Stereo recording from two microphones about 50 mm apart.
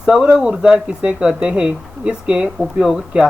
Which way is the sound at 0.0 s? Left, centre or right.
Centre.